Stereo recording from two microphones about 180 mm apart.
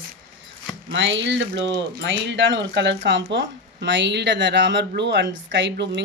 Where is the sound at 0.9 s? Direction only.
85° right.